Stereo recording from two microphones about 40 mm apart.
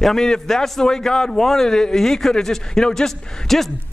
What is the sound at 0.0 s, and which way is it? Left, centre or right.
A man's voice, centre.